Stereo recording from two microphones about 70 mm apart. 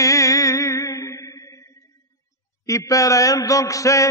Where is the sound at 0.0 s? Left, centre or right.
Left.